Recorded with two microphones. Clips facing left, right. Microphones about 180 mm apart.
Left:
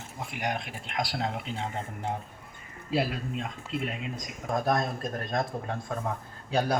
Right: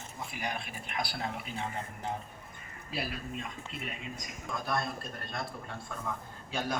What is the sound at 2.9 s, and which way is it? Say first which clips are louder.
Speech: left 8 dB; 90° left.